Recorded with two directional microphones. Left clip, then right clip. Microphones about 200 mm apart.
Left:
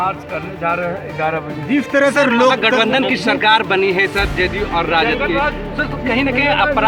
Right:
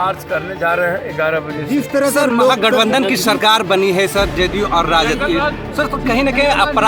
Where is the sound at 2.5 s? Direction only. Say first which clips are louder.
Right 1 dB; 60° right (ahead or behind).